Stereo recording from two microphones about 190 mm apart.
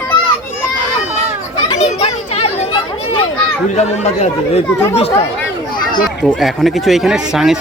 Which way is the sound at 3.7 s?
35° left (ahead or behind).